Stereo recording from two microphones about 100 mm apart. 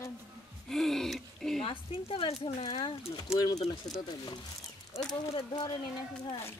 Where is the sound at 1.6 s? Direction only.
65° left (ahead or behind).